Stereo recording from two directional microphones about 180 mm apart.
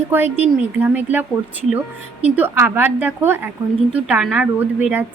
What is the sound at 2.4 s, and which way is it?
A woman's voice, 10° right (ahead or behind).